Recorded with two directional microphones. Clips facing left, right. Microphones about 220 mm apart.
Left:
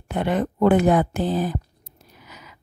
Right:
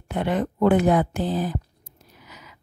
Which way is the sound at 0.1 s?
50° left (ahead or behind).